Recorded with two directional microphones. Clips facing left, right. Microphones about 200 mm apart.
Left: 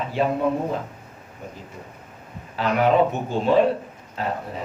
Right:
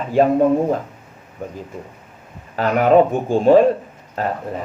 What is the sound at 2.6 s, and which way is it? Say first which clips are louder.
Speech: right 5 dB; 45° right (ahead or behind).